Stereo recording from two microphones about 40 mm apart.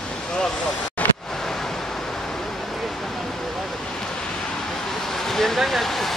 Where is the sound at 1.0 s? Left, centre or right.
Left.